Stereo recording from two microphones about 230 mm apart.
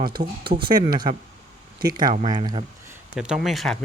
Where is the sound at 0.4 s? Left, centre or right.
Right.